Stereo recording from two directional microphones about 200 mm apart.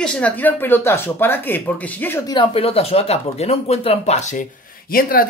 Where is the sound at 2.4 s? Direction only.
30° left (ahead or behind).